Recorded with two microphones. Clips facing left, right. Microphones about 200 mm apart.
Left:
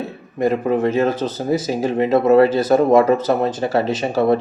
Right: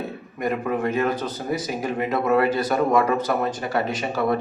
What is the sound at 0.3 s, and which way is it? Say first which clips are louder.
Speech: left 7 dB; 30° left (ahead or behind).